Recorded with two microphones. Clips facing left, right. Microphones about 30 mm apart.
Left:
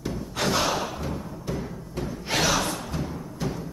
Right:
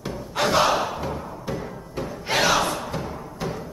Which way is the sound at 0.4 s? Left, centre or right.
Centre.